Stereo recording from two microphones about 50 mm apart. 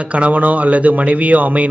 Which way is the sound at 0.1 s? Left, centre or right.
Right.